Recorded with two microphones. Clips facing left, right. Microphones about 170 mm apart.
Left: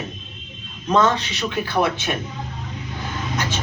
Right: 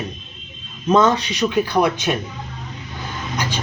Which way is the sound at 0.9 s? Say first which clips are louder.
Right 3 dB; 15° right (ahead or behind).